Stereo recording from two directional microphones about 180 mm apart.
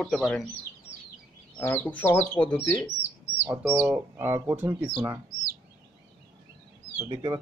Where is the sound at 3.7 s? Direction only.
5° right (ahead or behind).